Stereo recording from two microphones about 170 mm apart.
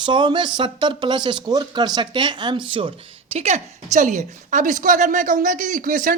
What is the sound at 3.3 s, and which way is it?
A woman's voice, 40° right (ahead or behind).